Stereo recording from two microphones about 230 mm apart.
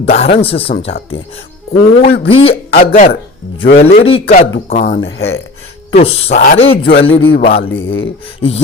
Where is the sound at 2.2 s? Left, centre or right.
Left.